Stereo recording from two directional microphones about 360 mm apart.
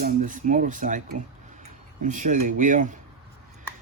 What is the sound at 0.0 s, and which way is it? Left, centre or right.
Speech, right.